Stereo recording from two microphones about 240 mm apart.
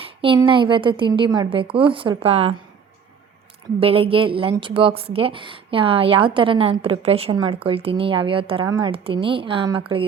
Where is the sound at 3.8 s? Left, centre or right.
Right.